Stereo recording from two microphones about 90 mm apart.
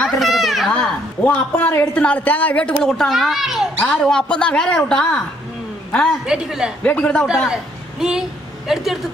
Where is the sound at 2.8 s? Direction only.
Centre (ahead or behind).